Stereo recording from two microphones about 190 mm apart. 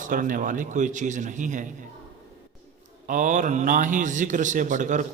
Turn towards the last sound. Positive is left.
turn(degrees=-40)  # may be behind; listen again after turning